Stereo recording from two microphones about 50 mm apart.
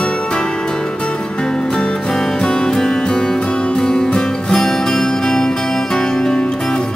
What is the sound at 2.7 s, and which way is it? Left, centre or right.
Music, centre.